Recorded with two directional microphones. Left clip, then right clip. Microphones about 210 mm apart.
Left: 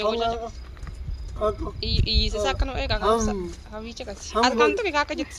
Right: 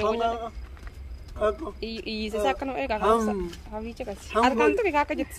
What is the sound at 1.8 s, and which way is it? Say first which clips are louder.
Speech: left 7 dB; 45° right (ahead or behind).